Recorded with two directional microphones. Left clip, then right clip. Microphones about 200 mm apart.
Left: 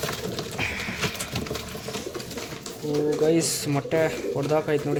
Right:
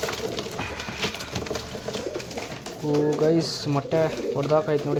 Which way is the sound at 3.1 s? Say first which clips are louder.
Left 2 dB; centre (ahead or behind).